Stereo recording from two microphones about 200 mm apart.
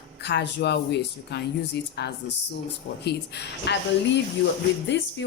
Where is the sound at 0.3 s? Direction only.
60° left (ahead or behind).